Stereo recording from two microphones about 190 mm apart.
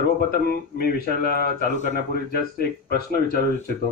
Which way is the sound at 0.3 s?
50° left (ahead or behind).